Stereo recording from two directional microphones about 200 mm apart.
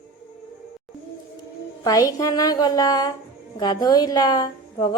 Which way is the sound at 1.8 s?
15° left (ahead or behind).